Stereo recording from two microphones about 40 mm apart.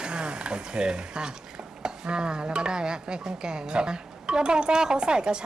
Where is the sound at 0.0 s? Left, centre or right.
Right.